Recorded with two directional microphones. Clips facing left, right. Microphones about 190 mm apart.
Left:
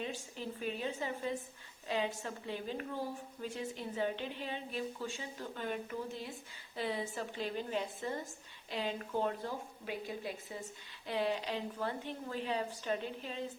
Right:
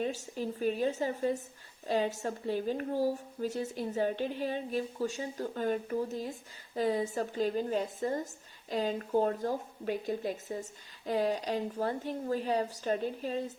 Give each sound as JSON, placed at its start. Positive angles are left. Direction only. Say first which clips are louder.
{"t": 0.0, "sound": "a woman's voice", "louder": "right 7 dB", "side_deg": -40}